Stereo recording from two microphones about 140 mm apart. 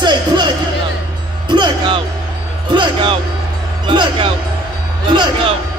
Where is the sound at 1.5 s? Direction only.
35° right (ahead or behind).